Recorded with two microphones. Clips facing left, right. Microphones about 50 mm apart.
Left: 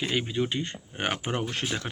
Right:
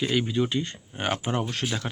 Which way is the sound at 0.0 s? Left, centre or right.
Left.